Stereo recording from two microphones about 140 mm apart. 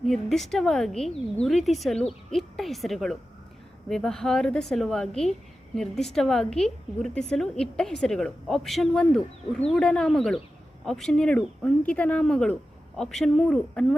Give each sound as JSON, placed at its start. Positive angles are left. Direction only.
{"t": 0.0, "sound": "a woman's voice", "side_deg": 0}